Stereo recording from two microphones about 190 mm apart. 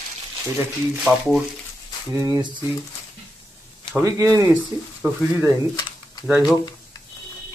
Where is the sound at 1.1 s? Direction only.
5° right (ahead or behind).